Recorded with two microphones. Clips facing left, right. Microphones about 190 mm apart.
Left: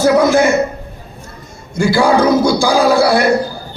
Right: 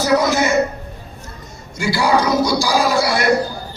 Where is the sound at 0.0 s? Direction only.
55° left (ahead or behind).